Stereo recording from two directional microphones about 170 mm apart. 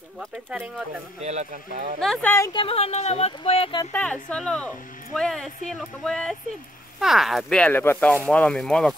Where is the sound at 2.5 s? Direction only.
30° left (ahead or behind).